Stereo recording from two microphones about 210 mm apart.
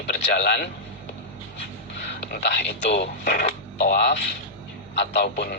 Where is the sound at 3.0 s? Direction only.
55° left (ahead or behind).